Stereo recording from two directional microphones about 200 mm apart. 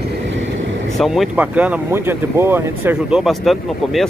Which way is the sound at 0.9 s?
Centre (ahead or behind).